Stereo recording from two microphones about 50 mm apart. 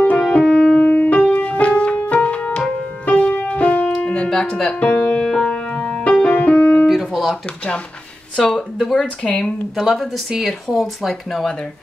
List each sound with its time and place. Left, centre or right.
0.0 s music: left
0.4 s music: centre
0.8 s music: left
4.3 s music: centre; by 5.2 s left
5.2 s music: centre
6.2 s music: left
6.9 s guitar: centre
7.4 s speech: left
9.8 s speech: centre